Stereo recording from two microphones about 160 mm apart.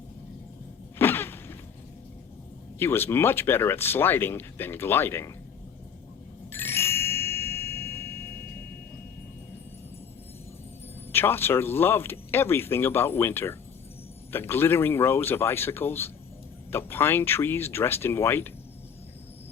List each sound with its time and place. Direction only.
0.9 s a sound: 15° left (ahead or behind)
2.7 s speech: 15° left (ahead or behind)
6.5 s ding: 15° left (ahead or behind)
11.1 s speech: 15° left (ahead or behind)